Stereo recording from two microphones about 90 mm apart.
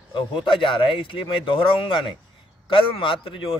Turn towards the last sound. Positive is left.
turn(degrees=80)